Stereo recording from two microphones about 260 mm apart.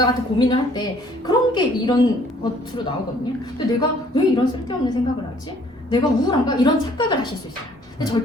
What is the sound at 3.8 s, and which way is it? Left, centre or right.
Speech, centre.